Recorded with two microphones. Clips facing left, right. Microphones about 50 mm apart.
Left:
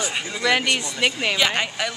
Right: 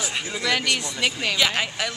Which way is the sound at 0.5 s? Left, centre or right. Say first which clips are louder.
Left 4 dB; centre.